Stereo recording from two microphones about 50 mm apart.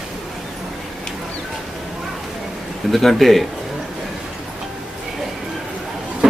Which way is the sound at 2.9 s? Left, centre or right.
Centre.